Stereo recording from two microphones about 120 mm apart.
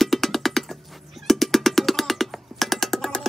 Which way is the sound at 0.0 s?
Centre (ahead or behind).